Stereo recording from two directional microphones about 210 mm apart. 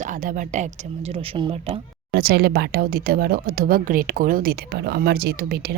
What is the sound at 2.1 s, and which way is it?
Speech, 45° right (ahead or behind).